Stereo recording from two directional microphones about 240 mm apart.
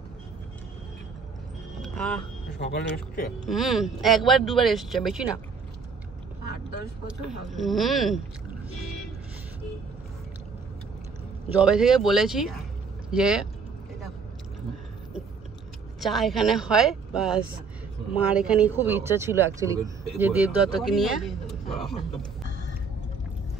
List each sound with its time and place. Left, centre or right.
1.8 s a sound: centre
2.6 s speech: left
3.4 s speech: centre
7.2 s speech: centre
11.6 s speech: centre
16.0 s speech: centre